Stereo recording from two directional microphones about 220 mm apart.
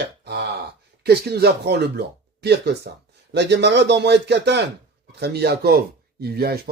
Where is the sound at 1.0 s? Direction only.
45° right (ahead or behind).